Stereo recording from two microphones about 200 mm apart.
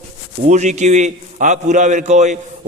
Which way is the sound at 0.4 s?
35° right (ahead or behind).